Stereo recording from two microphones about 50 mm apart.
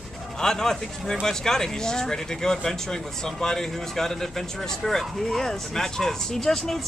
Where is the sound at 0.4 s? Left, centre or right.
Centre.